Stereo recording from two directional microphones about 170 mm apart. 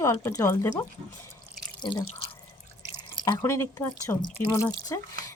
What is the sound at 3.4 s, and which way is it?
Speech, 15° left (ahead or behind).